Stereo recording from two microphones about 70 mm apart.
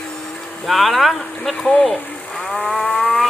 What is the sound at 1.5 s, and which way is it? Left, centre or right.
Speech, centre.